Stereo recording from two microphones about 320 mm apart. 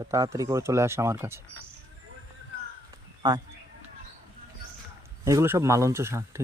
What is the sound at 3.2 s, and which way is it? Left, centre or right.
Speech, centre.